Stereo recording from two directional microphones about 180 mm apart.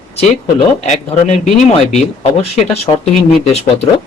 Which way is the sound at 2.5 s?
35° left (ahead or behind).